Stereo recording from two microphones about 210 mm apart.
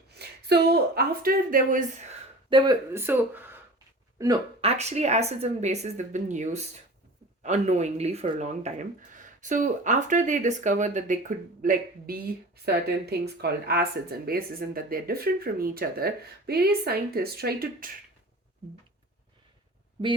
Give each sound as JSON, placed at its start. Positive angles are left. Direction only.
{"t": 0.2, "sound": "a woman's voice", "side_deg": -50}
{"t": 2.5, "sound": "speech", "side_deg": -20}
{"t": 4.6, "sound": "speech", "side_deg": -30}